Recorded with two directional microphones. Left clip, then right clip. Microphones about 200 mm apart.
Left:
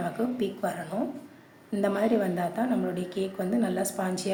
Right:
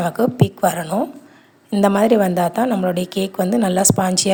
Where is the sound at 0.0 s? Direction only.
55° right (ahead or behind).